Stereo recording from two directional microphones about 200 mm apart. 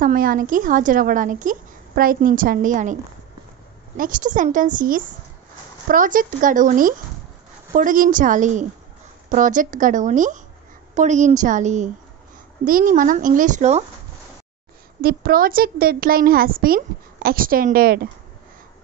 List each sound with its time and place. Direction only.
0.0 s a woman's voice: 45° right (ahead or behind)
15.0 s a woman's voice: 50° right (ahead or behind)